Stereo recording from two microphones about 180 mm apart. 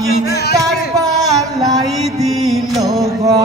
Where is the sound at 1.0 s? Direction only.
20° right (ahead or behind).